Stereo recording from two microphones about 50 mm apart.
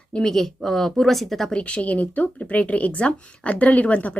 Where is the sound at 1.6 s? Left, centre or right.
Left.